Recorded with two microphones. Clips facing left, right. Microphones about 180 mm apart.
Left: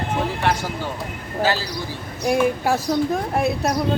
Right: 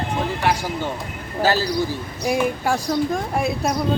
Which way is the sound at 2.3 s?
Centre (ahead or behind).